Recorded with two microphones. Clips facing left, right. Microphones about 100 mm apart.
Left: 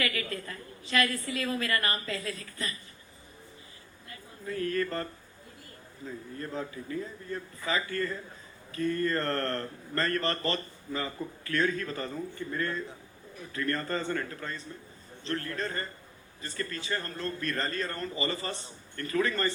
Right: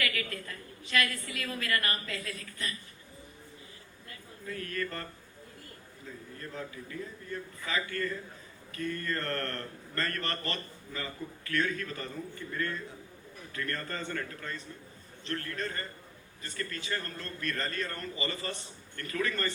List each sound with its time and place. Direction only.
0.0 s a woman's voice: 30° left (ahead or behind)
4.4 s speech: 30° left (ahead or behind)
6.4 s speech: 35° left (ahead or behind)